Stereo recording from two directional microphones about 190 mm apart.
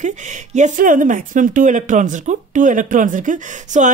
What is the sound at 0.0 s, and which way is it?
Speech, 40° right (ahead or behind).